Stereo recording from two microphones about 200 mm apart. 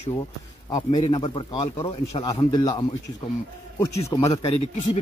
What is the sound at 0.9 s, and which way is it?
Speech, 20° left (ahead or behind).